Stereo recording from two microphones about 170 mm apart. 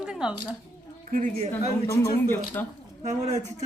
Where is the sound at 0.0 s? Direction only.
5° right (ahead or behind).